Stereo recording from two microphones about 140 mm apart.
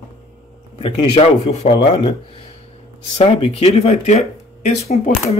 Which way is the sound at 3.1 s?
45° left (ahead or behind).